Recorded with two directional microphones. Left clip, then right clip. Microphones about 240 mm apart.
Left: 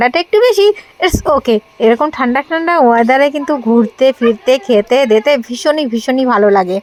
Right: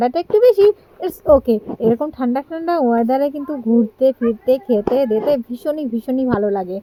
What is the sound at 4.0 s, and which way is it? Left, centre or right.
Speech, centre.